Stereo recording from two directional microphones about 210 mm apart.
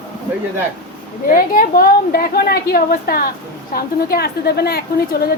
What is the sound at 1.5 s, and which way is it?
A woman's voice, 45° left (ahead or behind).